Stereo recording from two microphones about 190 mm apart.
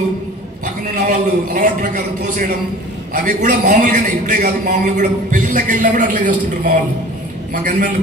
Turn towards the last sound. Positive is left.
turn(degrees=-45)  # may be behind; listen again after turning